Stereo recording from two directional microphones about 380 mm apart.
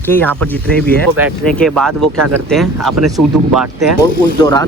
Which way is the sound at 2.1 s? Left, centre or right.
Right.